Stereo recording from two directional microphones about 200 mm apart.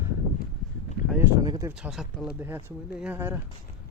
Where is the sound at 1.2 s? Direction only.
20° right (ahead or behind).